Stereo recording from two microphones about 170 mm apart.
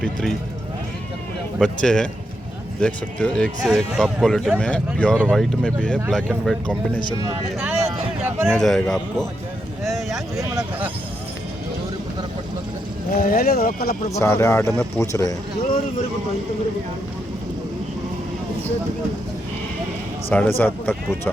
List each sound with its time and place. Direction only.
0.0 s speech: 5° left (ahead or behind)
1.6 s speech: 5° left (ahead or behind)
7.6 s a sound: 5° right (ahead or behind)
8.4 s speech: 5° left (ahead or behind)
9.8 s a sound: centre (ahead or behind)
13.1 s speech: 60° left (ahead or behind)
14.2 s speech: 15° left (ahead or behind)
20.3 s speech: 10° left (ahead or behind)